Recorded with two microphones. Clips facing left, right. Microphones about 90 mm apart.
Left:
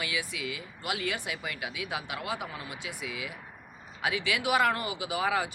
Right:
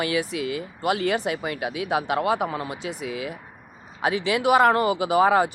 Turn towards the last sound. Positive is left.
turn(degrees=-45)  # may be behind; listen again after turning